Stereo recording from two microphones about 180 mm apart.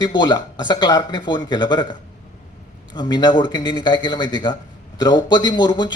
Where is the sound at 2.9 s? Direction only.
25° left (ahead or behind).